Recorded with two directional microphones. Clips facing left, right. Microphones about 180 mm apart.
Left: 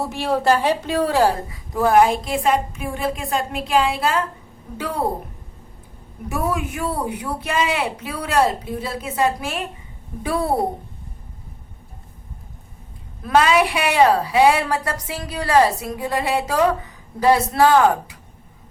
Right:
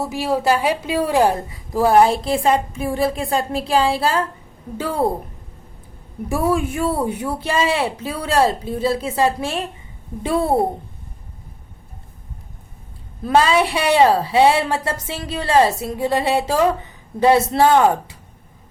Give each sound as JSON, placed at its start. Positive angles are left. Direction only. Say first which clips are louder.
{"t": 0.0, "sound": "a woman's voice", "louder": "right 1 dB", "side_deg": -5}
{"t": 6.2, "sound": "a woman's voice", "louder": "right 4 dB", "side_deg": -30}
{"t": 13.2, "sound": "a woman's voice", "louder": "right 1 dB", "side_deg": -30}